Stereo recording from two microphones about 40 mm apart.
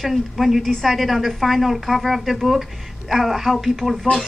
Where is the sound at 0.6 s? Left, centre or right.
Centre.